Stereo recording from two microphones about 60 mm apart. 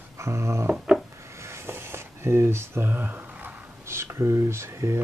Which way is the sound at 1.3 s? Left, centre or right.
Right.